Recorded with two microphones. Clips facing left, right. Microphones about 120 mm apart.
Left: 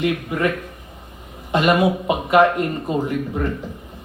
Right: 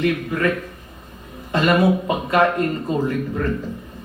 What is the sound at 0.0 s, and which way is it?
Speech, 20° left (ahead or behind).